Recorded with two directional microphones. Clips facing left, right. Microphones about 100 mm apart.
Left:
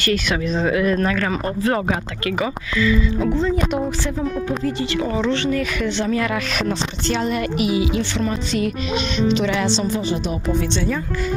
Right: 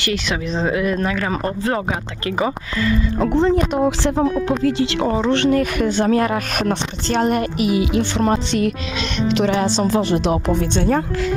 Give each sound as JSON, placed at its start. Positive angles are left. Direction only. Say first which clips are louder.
{"t": 0.0, "sound": "speech", "louder": "left 2 dB", "side_deg": -20}
{"t": 1.3, "sound": "speech", "louder": "even", "side_deg": -30}
{"t": 1.7, "sound": "speech", "louder": "left 1 dB", "side_deg": -20}
{"t": 2.8, "sound": "speech", "louder": "even", "side_deg": -55}
{"t": 5.0, "sound": "speech", "louder": "right 3 dB", "side_deg": -40}
{"t": 5.3, "sound": "speech", "louder": "right 4 dB", "side_deg": -60}
{"t": 9.4, "sound": "speech", "louder": "right 2 dB", "side_deg": -40}
{"t": 9.8, "sound": "speech", "louder": "right 5 dB", "side_deg": -80}
{"t": 10.6, "sound": "speech", "louder": "right 4 dB", "side_deg": -50}